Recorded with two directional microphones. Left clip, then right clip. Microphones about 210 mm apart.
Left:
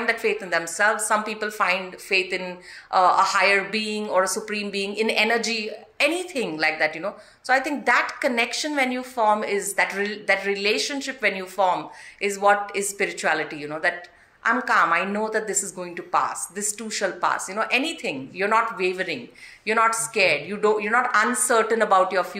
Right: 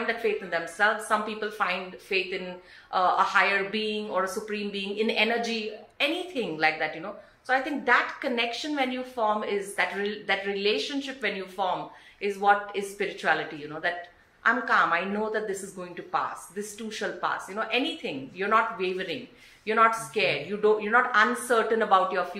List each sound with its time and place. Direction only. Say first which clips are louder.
0.0 s speech: left 4 dB; 40° left (ahead or behind)